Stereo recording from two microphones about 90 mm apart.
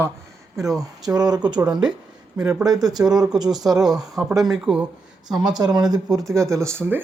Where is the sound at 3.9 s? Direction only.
5° right (ahead or behind).